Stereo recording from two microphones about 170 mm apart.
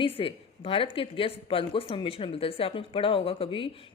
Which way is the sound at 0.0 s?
30° left (ahead or behind).